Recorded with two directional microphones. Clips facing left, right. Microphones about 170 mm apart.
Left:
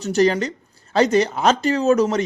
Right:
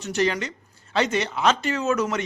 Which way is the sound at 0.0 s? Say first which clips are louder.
Left 6 dB; 35° left (ahead or behind).